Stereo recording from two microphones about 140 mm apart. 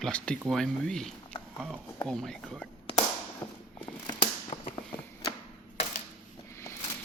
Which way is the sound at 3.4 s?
30° left (ahead or behind).